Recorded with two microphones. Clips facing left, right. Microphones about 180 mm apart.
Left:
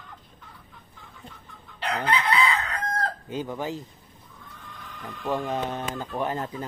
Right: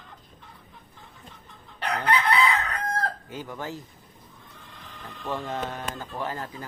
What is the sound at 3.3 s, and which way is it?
Speech, 20° left (ahead or behind).